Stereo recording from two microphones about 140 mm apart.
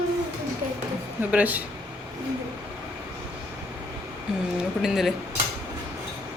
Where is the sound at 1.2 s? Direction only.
10° right (ahead or behind).